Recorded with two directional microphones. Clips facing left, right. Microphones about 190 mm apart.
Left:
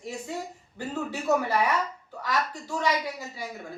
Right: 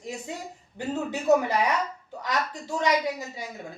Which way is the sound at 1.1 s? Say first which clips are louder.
Right 3 dB; 20° right (ahead or behind).